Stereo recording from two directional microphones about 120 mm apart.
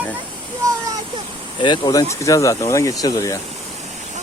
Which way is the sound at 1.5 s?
40° left (ahead or behind).